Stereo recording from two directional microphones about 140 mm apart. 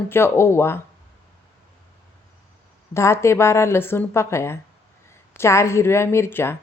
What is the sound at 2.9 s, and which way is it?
A woman's voice, 20° left (ahead or behind).